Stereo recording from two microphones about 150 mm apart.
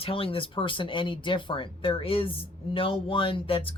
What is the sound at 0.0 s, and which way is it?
Speech, 40° left (ahead or behind).